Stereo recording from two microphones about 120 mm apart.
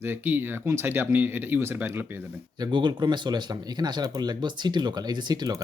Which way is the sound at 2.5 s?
35° right (ahead or behind).